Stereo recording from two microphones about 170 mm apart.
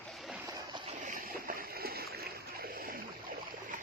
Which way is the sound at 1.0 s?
50° right (ahead or behind).